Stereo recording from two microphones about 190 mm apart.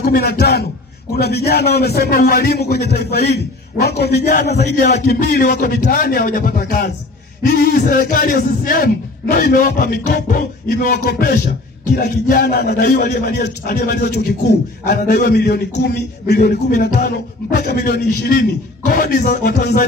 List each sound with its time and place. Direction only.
0.0 s a man's voice: 55° left (ahead or behind)